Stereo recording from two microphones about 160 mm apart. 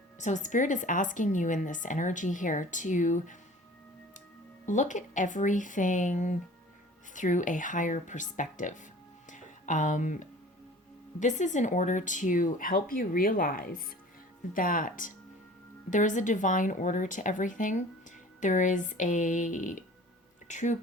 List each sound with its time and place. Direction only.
0.2 s a woman's voice: 50° left (ahead or behind)
4.6 s a woman's voice: 50° left (ahead or behind)
9.3 s a sound: 50° left (ahead or behind)
11.2 s a woman's voice: 50° left (ahead or behind)